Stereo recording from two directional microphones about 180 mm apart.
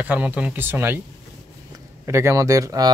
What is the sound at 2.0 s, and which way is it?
Speech, 15° right (ahead or behind).